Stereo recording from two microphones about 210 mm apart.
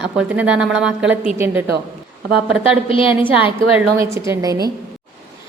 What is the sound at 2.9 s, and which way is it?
Speech, 25° left (ahead or behind).